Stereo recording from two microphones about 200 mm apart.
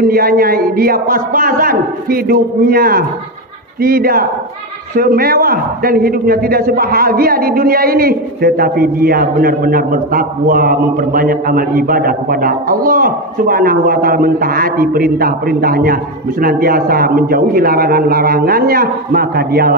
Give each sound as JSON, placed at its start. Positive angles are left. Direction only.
{"t": 0.0, "sound": "a man's voice", "side_deg": -45}